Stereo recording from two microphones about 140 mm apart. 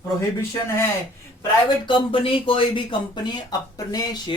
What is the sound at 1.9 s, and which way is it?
Speech, 40° left (ahead or behind).